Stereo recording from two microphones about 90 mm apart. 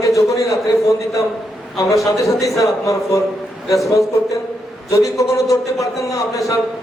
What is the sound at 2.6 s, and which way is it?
Speech, 35° left (ahead or behind).